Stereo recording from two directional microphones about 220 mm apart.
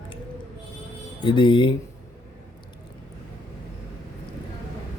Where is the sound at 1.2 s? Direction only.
20° left (ahead or behind).